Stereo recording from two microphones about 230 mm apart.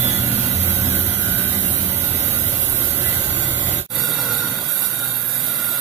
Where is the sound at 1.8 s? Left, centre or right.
Right.